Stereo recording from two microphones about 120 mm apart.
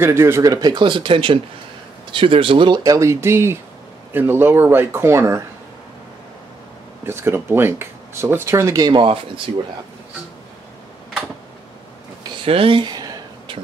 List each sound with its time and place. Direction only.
0.0 s speech: 20° right (ahead or behind); by 2.8 s 45° right (ahead or behind)
2.8 s speech: 25° right (ahead or behind)
7.1 s speech: 20° right (ahead or behind)
8.9 s speech: 45° right (ahead or behind)
12.4 s a sound: 50° right (ahead or behind)